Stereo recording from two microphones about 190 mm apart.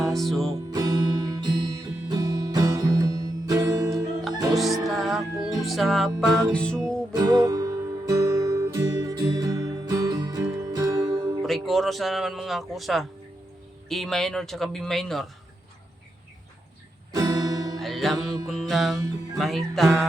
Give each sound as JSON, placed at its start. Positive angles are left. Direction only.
{"t": 0.0, "sound": "music", "side_deg": 0}
{"t": 0.7, "sound": "music", "side_deg": -20}
{"t": 4.5, "sound": "music", "side_deg": 0}
{"t": 5.6, "sound": "speech", "side_deg": 0}
{"t": 7.1, "sound": "music", "side_deg": -20}
{"t": 11.4, "sound": "speech", "side_deg": 0}
{"t": 17.1, "sound": "music", "side_deg": -20}
{"t": 17.7, "sound": "music", "side_deg": 0}
{"t": 19.4, "sound": "speech", "side_deg": 0}